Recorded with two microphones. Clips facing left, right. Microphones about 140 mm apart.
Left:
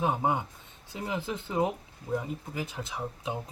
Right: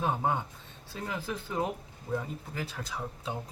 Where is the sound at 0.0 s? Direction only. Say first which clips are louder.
Left 2 dB; 15° left (ahead or behind).